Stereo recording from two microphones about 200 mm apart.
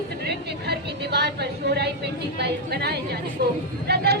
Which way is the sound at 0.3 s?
55° right (ahead or behind).